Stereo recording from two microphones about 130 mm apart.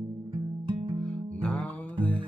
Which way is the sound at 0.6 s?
40° right (ahead or behind).